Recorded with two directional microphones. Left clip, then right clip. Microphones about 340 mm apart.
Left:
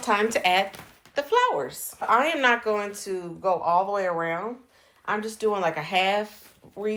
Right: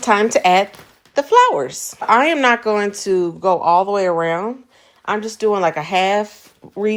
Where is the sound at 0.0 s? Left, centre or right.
Centre.